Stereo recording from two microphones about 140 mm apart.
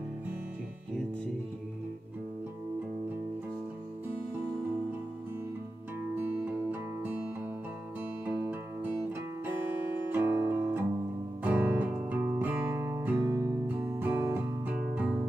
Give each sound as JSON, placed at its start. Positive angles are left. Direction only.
{"t": 6.4, "sound": "music", "side_deg": -10}
{"t": 9.7, "sound": "music", "side_deg": -15}